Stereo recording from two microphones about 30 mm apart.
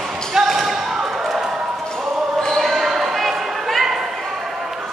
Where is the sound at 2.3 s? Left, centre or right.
Centre.